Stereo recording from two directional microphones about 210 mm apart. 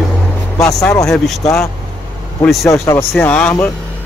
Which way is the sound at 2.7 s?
15° left (ahead or behind).